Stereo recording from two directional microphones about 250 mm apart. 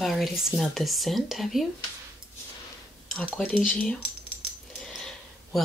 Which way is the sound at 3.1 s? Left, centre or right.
Centre.